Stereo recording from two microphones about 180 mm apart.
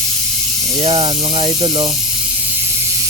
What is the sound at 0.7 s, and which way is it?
Speech, 35° right (ahead or behind).